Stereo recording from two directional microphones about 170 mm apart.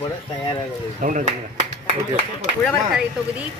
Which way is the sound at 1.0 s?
50° right (ahead or behind).